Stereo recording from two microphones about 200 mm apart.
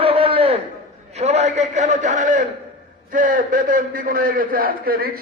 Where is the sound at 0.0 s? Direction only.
30° right (ahead or behind).